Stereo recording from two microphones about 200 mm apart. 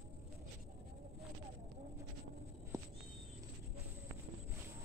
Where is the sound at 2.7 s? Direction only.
15° right (ahead or behind).